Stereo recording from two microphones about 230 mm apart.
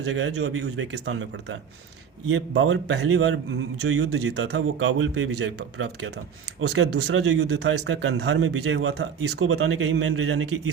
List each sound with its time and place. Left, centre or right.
0.2 s speech: right
4.3 s speech: right
4.9 s speech: right